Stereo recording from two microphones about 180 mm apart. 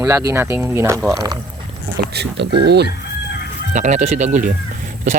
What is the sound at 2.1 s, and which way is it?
Speech, 65° right (ahead or behind).